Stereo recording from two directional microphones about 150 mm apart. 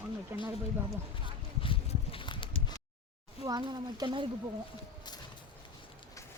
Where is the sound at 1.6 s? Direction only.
35° left (ahead or behind).